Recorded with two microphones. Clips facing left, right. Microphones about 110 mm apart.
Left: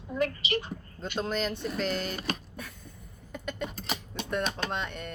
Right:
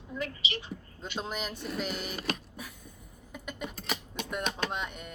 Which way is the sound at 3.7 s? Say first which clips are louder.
Left 1 dB; 35° left (ahead or behind).